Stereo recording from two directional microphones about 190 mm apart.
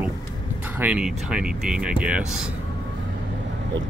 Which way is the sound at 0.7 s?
5° right (ahead or behind).